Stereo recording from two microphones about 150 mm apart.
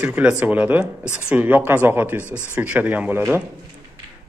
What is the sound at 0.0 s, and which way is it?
Speech, 10° right (ahead or behind).